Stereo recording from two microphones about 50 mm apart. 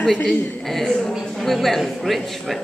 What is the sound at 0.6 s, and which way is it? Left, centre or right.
A woman's voice, centre.